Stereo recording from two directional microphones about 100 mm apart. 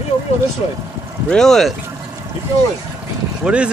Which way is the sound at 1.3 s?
5° left (ahead or behind).